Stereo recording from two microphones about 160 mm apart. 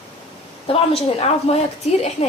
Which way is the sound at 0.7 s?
40° left (ahead or behind).